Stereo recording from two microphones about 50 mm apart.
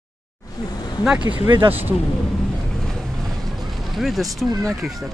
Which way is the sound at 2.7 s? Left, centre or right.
Centre.